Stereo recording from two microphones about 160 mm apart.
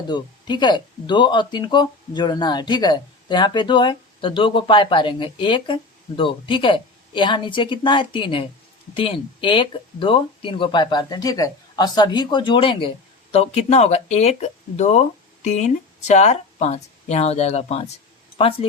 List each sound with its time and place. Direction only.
0.1 s speech: 30° left (ahead or behind); by 15.0 s 45° left (ahead or behind)
16.0 s speech: 45° left (ahead or behind)